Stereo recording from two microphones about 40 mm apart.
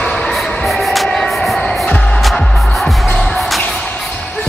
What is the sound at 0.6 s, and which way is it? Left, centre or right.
Music, centre.